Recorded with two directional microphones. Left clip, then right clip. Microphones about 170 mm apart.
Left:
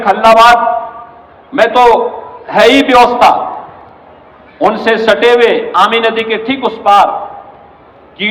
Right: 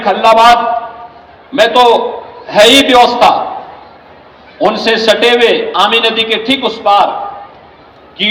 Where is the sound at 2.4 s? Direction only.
30° right (ahead or behind).